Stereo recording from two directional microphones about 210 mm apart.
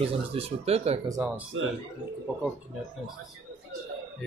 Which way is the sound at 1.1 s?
10° right (ahead or behind).